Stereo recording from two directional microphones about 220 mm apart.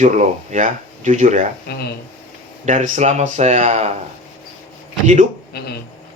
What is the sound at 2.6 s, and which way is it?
Speech, 35° right (ahead or behind).